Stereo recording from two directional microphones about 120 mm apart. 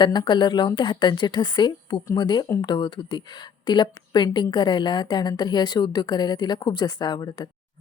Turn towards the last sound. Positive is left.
turn(degrees=35)  # may be behind; listen again after turning